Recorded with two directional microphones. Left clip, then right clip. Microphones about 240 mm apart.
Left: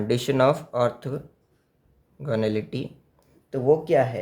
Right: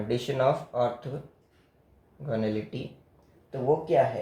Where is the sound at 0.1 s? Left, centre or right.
Left.